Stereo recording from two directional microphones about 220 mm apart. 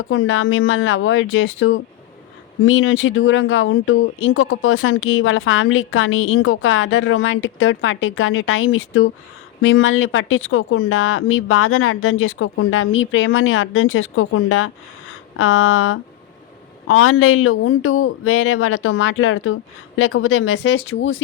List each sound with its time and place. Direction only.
0.1 s speech: 65° left (ahead or behind)